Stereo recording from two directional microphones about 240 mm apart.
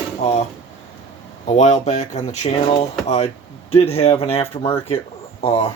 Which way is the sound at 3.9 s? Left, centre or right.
Left.